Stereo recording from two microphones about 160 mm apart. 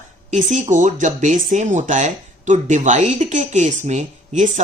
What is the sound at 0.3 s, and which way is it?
Speech, 50° right (ahead or behind).